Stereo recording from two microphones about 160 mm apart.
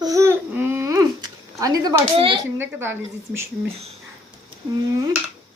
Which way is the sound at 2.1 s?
35° right (ahead or behind).